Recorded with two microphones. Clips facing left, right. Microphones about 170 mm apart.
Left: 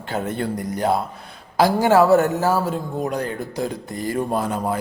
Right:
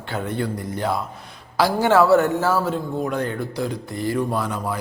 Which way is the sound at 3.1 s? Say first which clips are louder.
Right 1 dB; 40° left (ahead or behind).